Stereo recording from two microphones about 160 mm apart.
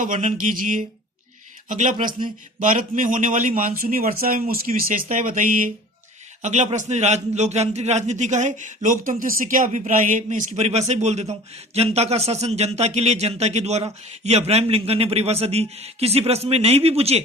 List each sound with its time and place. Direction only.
0.0 s a man's voice: 55° right (ahead or behind)